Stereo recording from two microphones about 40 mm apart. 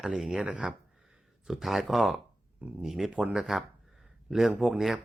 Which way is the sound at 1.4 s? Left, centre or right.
Centre.